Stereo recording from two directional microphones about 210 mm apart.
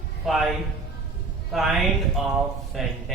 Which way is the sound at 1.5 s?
Centre (ahead or behind).